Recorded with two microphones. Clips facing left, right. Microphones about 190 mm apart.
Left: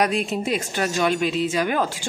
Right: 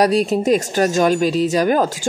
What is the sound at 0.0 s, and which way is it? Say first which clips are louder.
Speech: right 7 dB; 35° right (ahead or behind).